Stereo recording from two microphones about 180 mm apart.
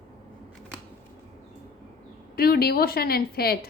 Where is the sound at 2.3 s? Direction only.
60° left (ahead or behind).